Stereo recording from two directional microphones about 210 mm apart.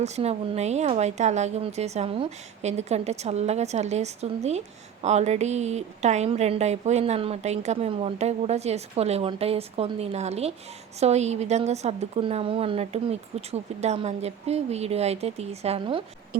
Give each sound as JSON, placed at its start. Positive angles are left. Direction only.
{"t": 0.0, "sound": "a woman's voice", "side_deg": -30}